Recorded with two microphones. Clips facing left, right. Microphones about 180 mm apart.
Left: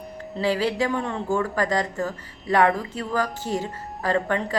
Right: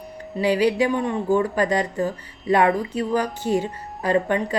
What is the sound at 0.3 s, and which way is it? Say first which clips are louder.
Speech: right 4 dB; 15° right (ahead or behind).